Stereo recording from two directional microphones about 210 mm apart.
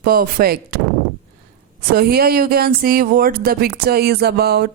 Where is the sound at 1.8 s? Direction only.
45° right (ahead or behind).